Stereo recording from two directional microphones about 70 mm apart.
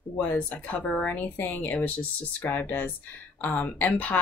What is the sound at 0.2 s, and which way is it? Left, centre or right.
Speech, left.